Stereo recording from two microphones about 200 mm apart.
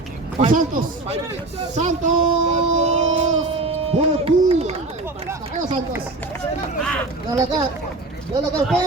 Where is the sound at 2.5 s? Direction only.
35° right (ahead or behind).